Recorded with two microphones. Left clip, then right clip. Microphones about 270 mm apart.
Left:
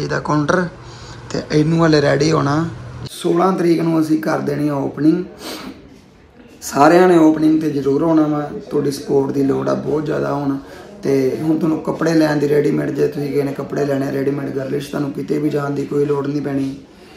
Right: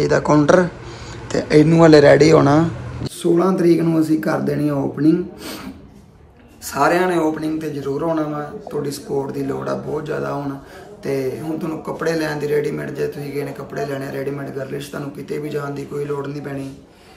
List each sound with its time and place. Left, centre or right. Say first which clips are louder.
0.0 s speech: right 4 dB; centre
3.5 s a man's voice: even; centre
6.6 s a man's voice: left 6 dB; centre